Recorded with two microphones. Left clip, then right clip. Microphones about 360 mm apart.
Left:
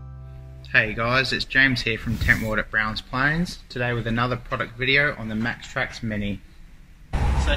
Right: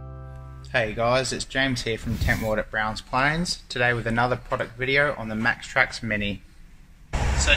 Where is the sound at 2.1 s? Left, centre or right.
Centre.